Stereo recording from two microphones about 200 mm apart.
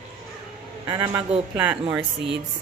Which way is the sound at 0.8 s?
20° right (ahead or behind).